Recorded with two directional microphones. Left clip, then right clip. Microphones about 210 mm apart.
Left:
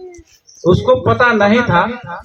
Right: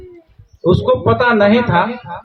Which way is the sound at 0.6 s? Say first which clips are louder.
Left 2 dB; 15° right (ahead or behind).